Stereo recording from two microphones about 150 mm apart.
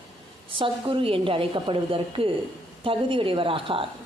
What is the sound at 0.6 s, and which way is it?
Speech, 35° right (ahead or behind).